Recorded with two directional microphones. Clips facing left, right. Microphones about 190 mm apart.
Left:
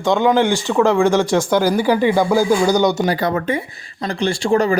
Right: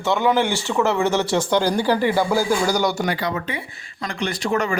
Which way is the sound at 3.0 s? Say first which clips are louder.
Left 5 dB; 40° left (ahead or behind).